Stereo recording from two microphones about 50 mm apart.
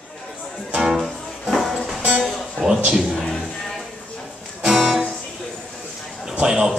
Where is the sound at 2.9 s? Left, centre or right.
Centre.